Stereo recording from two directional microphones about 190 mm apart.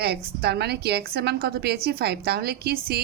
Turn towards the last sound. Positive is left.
turn(degrees=-55)  # may be behind; listen again after turning